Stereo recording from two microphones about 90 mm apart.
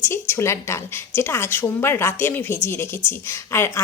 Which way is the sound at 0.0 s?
30° left (ahead or behind).